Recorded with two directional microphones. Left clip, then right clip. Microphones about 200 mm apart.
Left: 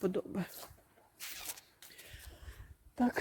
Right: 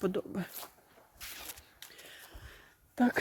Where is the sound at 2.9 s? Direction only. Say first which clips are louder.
Right 4 dB; 15° right (ahead or behind).